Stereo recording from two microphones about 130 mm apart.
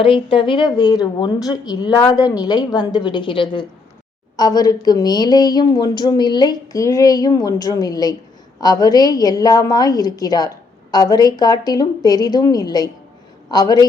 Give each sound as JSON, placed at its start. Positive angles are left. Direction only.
{"t": 0.0, "sound": "a woman's voice", "side_deg": 45}